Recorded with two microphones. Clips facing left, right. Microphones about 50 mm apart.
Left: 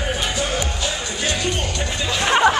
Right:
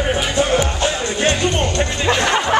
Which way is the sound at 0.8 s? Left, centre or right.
Right.